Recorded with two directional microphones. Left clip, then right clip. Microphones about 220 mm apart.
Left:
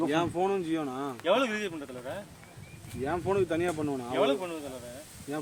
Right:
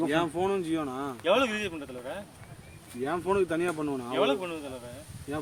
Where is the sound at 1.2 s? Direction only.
25° right (ahead or behind).